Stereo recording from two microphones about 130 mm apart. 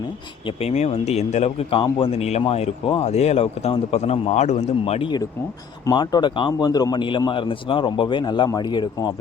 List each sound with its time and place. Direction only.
0.4 s a man's voice: 55° left (ahead or behind)
5.8 s a man's voice: 30° left (ahead or behind)